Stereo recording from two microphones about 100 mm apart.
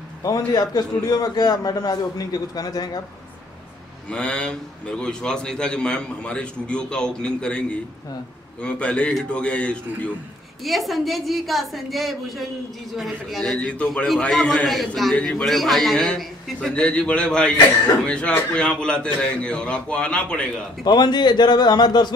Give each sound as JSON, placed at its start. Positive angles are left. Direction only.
{"t": 0.2, "sound": "a man's voice", "side_deg": 40}
{"t": 4.1, "sound": "a man's voice", "side_deg": 10}
{"t": 10.6, "sound": "a woman's voice", "side_deg": 0}
{"t": 20.8, "sound": "speech", "side_deg": 45}